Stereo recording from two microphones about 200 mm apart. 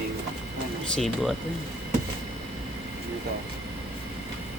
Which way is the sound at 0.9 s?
Centre (ahead or behind).